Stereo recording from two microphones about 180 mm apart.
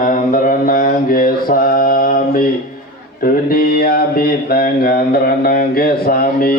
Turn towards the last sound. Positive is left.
turn(degrees=55)  # may be behind; listen again after turning